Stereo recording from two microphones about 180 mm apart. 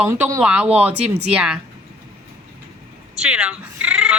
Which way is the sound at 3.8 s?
5° right (ahead or behind).